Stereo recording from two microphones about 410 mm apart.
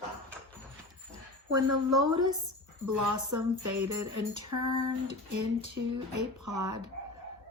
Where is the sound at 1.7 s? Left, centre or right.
Right.